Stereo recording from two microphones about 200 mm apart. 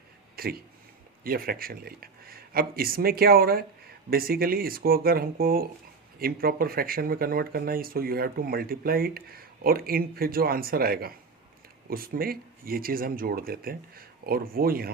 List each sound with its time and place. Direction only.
0.3 s speech: 50° right (ahead or behind)